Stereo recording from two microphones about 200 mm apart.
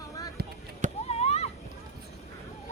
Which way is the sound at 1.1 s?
30° left (ahead or behind).